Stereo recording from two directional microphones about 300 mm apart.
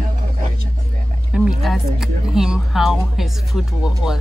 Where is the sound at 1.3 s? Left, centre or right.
Centre.